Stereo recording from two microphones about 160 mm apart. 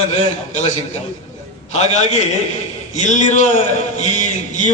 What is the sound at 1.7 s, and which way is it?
A man's voice, 45° left (ahead or behind).